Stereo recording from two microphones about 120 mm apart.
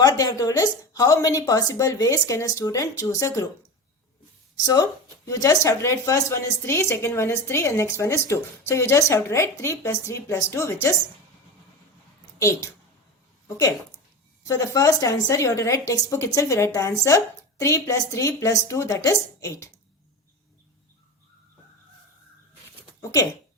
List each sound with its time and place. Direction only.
0.0 s speech: 30° left (ahead or behind)
4.6 s speech: 30° left (ahead or behind)
12.4 s speech: 25° left (ahead or behind)
14.4 s speech: 25° left (ahead or behind)